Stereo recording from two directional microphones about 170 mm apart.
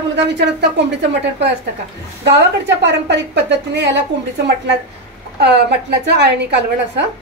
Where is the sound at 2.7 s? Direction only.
90° right.